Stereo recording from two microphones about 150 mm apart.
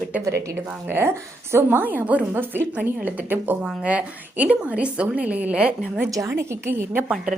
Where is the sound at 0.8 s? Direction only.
15° right (ahead or behind).